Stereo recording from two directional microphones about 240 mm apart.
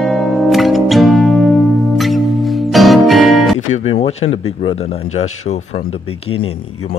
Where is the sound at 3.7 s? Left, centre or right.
Left.